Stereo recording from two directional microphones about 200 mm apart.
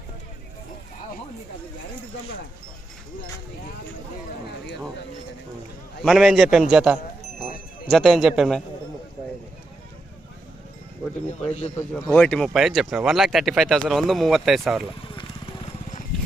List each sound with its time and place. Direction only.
6.0 s speech: centre (ahead or behind)
11.3 s a man's voice: 35° left (ahead or behind)
12.2 s speech: 5° left (ahead or behind)